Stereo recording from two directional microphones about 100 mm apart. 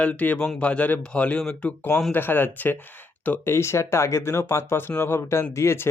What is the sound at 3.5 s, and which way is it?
Speech, 30° left (ahead or behind).